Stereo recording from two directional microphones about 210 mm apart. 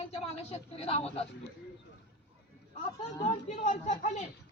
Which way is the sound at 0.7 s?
30° left (ahead or behind).